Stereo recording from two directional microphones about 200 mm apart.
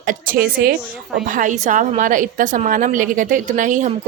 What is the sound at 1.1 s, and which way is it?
A woman's voice, 40° right (ahead or behind).